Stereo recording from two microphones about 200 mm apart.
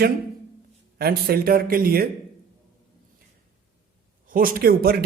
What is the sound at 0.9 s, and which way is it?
Speech, 50° right (ahead or behind).